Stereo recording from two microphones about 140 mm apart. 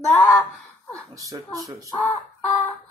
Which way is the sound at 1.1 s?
25° right (ahead or behind).